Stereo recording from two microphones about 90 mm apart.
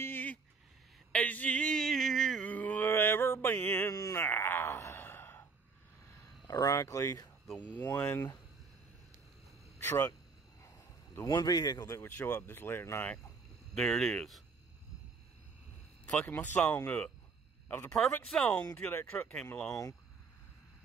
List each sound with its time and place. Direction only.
0.0 s a sound: 20° left (ahead or behind)
2.4 s mantra: 15° left (ahead or behind)
4.0 s a sound: 25° left (ahead or behind)
6.4 s speech: 45° left (ahead or behind)
7.5 s speech: 20° left (ahead or behind)
9.8 s speech: 30° left (ahead or behind)
11.1 s speech: 40° left (ahead or behind)
12.0 s speech: 20° left (ahead or behind)
13.7 s speech: 5° left (ahead or behind)
16.5 s speech: 20° left (ahead or behind)
17.9 s speech: 5° left (ahead or behind)
18.4 s speech: 15° left (ahead or behind)
19.7 s speech: 40° left (ahead or behind)